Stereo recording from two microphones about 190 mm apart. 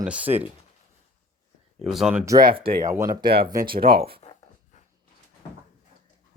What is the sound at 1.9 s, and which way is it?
Speech, 5° right (ahead or behind).